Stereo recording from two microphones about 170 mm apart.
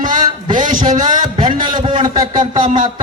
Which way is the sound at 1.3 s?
25° right (ahead or behind).